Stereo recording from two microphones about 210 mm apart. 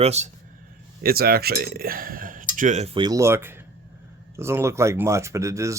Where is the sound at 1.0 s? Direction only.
45° right (ahead or behind).